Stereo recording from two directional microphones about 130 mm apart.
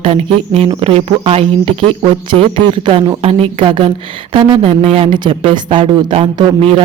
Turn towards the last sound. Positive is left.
turn(degrees=-45)  # may be behind; listen again after turning